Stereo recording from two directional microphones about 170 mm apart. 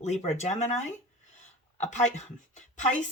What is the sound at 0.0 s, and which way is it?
Speech, 40° left (ahead or behind).